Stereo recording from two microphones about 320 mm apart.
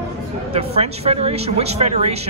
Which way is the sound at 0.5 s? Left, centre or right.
Centre.